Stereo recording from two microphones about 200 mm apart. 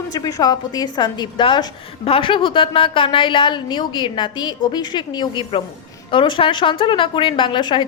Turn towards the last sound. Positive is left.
turn(degrees=25)  # may be behind; listen again after turning